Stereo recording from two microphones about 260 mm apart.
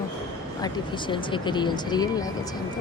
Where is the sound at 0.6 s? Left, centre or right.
Centre.